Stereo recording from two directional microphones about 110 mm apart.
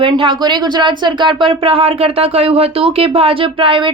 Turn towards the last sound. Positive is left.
turn(degrees=-50)  # may be behind; listen again after turning